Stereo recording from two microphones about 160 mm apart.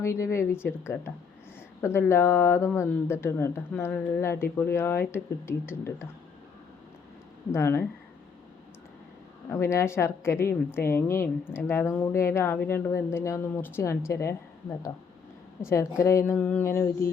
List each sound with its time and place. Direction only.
0.0 s speech: 20° left (ahead or behind)
7.5 s speech: 15° left (ahead or behind)
9.5 s speech: 15° left (ahead or behind)
15.7 s speech: 20° left (ahead or behind)